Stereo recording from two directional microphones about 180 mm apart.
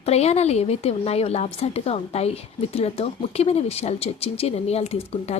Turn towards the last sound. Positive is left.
turn(degrees=35)  # may be behind; listen again after turning